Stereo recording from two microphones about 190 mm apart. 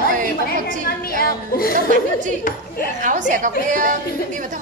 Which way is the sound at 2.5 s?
45° left (ahead or behind).